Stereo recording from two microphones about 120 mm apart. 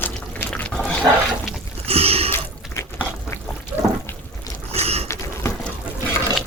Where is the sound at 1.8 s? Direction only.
55° right (ahead or behind).